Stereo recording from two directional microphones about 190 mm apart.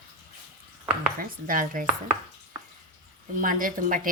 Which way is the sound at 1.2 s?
45° right (ahead or behind).